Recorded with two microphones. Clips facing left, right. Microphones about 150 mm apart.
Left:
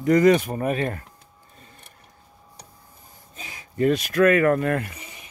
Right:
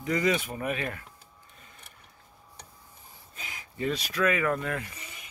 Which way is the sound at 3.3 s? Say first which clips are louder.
Left 3 dB; 25° left (ahead or behind).